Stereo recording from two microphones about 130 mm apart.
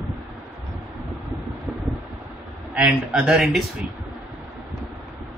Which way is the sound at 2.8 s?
10° right (ahead or behind).